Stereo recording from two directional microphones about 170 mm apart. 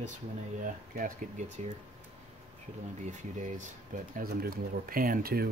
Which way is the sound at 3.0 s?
45° right (ahead or behind).